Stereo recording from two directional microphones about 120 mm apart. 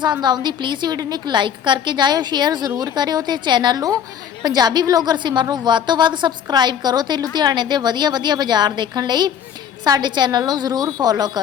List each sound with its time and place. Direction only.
0.0 s a woman's voice: 35° right (ahead or behind)